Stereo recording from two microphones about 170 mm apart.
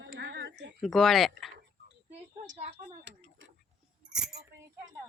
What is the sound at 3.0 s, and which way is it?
Speech, 85° right.